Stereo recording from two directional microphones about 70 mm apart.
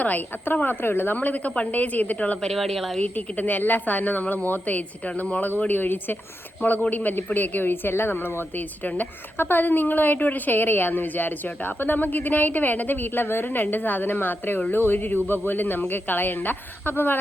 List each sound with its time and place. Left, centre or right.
0.0 s a woman's voice: left; by 3.0 s centre
3.0 s a woman's voice: left
8.8 s a woman's voice: left